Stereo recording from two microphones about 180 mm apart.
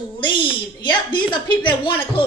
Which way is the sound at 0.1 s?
25° left (ahead or behind).